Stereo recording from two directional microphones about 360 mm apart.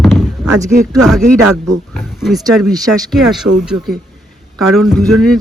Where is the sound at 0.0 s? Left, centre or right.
Centre.